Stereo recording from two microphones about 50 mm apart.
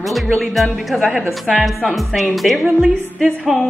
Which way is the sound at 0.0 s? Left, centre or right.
Centre.